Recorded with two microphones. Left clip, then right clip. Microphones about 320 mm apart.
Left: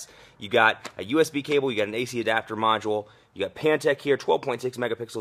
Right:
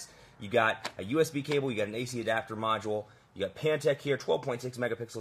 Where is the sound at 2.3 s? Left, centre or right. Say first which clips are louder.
Left 7 dB; left.